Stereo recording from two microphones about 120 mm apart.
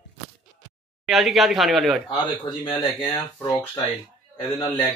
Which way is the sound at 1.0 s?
Centre (ahead or behind).